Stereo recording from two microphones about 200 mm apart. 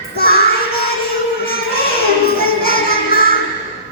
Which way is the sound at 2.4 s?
50° left (ahead or behind).